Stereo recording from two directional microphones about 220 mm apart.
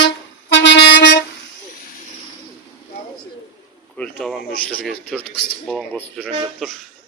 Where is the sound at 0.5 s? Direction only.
55° left (ahead or behind).